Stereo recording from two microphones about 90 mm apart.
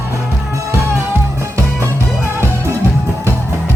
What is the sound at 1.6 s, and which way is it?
Music, 30° right (ahead or behind).